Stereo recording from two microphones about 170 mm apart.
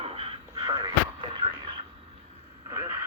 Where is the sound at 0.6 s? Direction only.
20° right (ahead or behind).